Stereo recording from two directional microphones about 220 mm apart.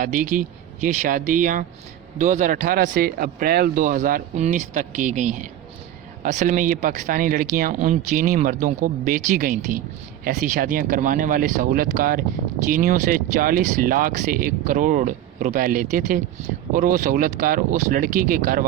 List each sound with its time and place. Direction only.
0.0 s speech: 35° right (ahead or behind)